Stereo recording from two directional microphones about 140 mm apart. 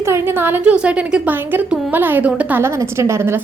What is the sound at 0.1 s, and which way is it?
A woman's voice, 15° right (ahead or behind).